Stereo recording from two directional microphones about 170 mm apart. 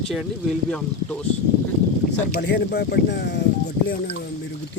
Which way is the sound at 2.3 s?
75° left (ahead or behind).